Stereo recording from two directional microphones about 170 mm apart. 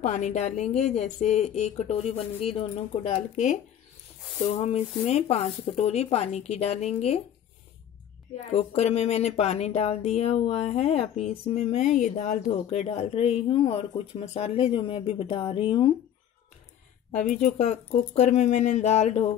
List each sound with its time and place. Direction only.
0.0 s speech: 45° left (ahead or behind)
3.2 s speech: 45° left (ahead or behind)
4.6 s speech: 40° left (ahead or behind)
8.5 s speech: 35° left (ahead or behind)
12.5 s speech: 35° left (ahead or behind)
17.1 s speech: 45° left (ahead or behind)